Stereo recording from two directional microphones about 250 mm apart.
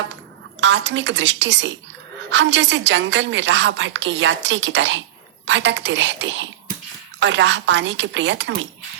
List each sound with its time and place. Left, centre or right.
0.6 s a woman's voice: right